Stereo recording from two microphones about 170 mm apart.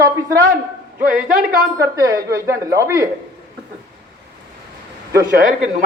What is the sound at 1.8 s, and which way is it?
Speech, 20° right (ahead or behind).